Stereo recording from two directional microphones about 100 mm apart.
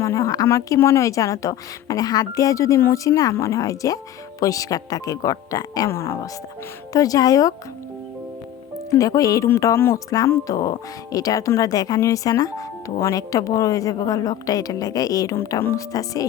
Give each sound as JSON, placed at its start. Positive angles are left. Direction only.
{"t": 0.0, "sound": "speech", "side_deg": 30}
{"t": 5.9, "sound": "speech", "side_deg": 25}
{"t": 6.9, "sound": "speech", "side_deg": 35}
{"t": 8.9, "sound": "speech", "side_deg": 35}